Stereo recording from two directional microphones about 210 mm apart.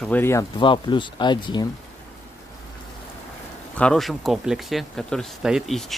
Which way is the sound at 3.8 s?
Centre (ahead or behind).